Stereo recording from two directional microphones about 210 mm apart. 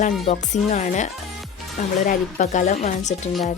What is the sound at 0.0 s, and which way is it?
Speech, 35° left (ahead or behind).